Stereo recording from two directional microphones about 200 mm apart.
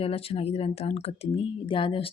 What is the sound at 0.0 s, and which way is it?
Speech, 30° left (ahead or behind).